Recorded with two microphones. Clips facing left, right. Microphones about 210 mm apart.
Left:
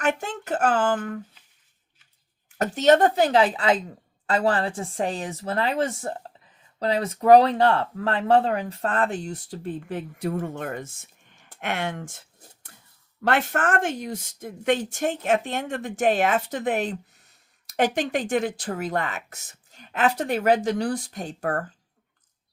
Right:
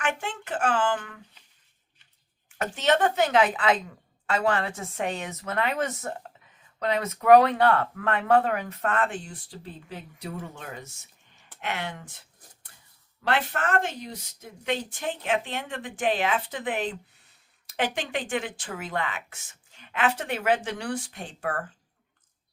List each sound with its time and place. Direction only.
0.0 s speech: 40° left (ahead or behind)
2.6 s speech: 40° left (ahead or behind)
13.2 s speech: 50° left (ahead or behind)